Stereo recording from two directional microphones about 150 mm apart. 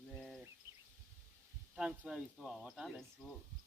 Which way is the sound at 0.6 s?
15° right (ahead or behind).